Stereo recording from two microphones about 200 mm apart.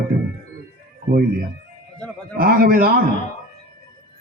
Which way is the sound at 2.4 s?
45° right (ahead or behind).